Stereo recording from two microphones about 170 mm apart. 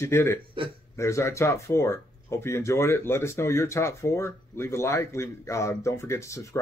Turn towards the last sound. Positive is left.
turn(degrees=15)  # may be behind; listen again after turning